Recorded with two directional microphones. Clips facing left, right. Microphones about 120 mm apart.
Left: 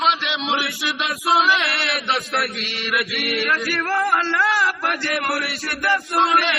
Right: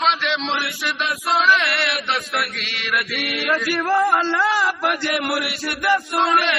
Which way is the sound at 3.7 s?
15° right (ahead or behind).